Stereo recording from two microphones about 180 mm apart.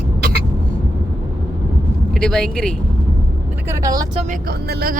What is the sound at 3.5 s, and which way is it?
Speech, 15° right (ahead or behind).